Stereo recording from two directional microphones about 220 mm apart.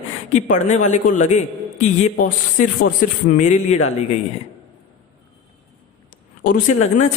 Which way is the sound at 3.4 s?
35° left (ahead or behind).